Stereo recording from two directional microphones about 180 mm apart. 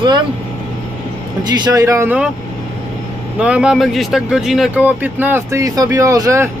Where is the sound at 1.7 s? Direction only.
20° right (ahead or behind).